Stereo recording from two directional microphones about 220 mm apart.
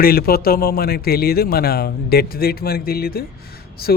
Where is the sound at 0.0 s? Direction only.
45° left (ahead or behind).